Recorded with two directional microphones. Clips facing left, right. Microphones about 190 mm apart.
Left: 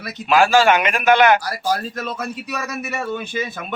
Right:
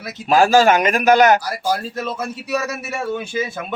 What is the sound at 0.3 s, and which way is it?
A man's voice, 40° right (ahead or behind).